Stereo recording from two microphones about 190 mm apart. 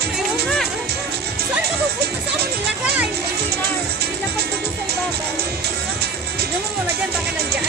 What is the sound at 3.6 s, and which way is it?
Music, 55° right (ahead or behind).